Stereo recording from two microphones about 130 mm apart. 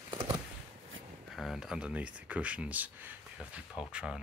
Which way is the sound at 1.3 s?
Centre (ahead or behind).